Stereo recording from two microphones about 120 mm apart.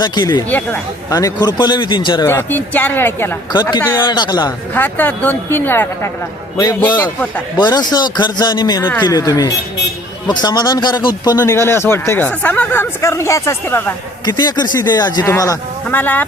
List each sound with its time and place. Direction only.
0.0 s a man's voice: 35° left (ahead or behind)
2.2 s speech: 20° left (ahead or behind)
3.5 s a man's voice: 40° left (ahead or behind)
3.8 s speech: 20° left (ahead or behind)
4.0 s a man's voice: 40° left (ahead or behind)
4.7 s speech: 15° left (ahead or behind)
7.5 s a man's voice: 35° left (ahead or behind)
11.3 s speech: 20° left (ahead or behind)
14.3 s a man's voice: 35° left (ahead or behind)
15.9 s speech: 15° left (ahead or behind)